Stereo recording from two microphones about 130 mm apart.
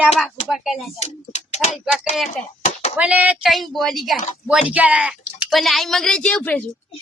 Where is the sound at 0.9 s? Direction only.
60° left (ahead or behind).